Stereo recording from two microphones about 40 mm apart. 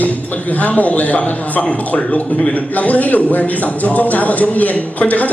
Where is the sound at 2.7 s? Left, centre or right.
Left.